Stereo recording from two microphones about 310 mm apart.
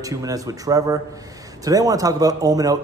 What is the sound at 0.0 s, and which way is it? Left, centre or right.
A man's voice, centre.